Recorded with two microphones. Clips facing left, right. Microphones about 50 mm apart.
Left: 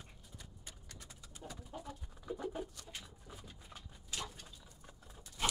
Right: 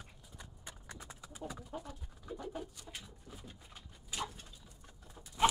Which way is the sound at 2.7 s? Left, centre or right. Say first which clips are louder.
Right 1 dB; centre.